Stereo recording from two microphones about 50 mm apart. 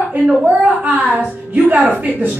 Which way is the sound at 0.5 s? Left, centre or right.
Right.